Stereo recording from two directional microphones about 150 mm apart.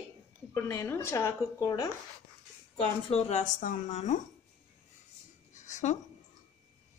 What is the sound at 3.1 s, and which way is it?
Speech, 45° left (ahead or behind).